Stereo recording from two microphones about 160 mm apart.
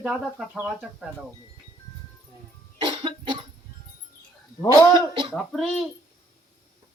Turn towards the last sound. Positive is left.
turn(degrees=0)  # may be behind; listen again after turning